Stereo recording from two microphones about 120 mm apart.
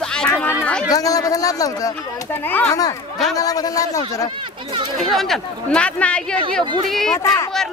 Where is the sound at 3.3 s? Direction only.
30° left (ahead or behind).